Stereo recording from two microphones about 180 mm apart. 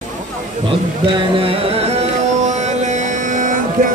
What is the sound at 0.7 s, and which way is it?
Carnatic music, 30° right (ahead or behind).